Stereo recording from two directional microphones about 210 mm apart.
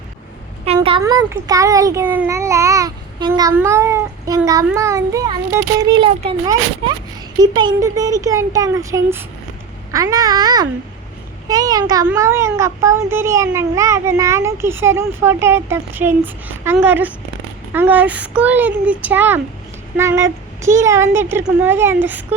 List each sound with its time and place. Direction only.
0.6 s a woman's voice: 30° right (ahead or behind); by 22.4 s 10° right (ahead or behind)